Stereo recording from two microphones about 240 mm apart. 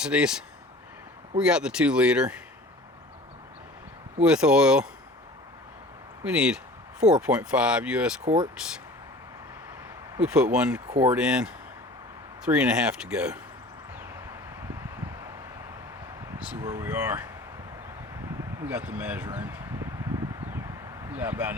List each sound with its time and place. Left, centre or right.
0.0 s speech: centre
4.2 s speech: centre
6.2 s speech: centre
8.2 s speech: right
10.2 s speech: centre
16.6 s speech: centre
18.3 s a sound: centre